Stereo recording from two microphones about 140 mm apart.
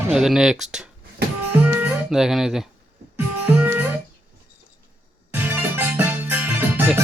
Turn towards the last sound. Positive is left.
turn(degrees=-15)  # may be behind; listen again after turning